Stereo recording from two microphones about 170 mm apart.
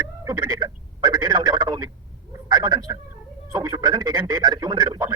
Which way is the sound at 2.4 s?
25° right (ahead or behind).